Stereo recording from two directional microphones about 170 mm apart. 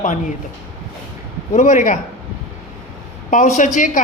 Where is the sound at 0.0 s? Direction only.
50° left (ahead or behind).